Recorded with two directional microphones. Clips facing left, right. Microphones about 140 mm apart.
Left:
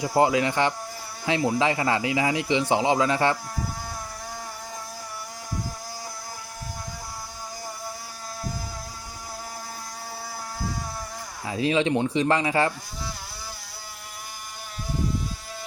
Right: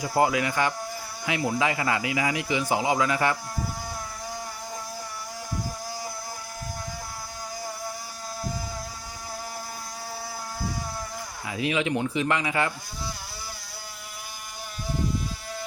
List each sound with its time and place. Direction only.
0.0 s speech: 25° left (ahead or behind)
11.4 s speech: 30° left (ahead or behind)